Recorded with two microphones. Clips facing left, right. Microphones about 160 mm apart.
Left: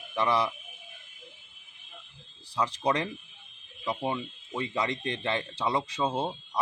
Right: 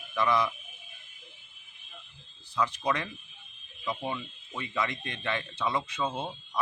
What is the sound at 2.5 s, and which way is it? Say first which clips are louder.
Speech: left 1 dB; 35° left (ahead or behind).